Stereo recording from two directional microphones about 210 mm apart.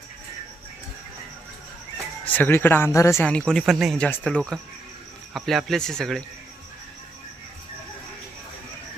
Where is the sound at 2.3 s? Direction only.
10° left (ahead or behind).